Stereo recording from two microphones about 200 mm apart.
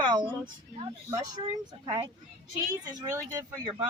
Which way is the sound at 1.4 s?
25° right (ahead or behind).